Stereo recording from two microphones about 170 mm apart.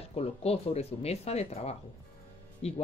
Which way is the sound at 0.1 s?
35° left (ahead or behind).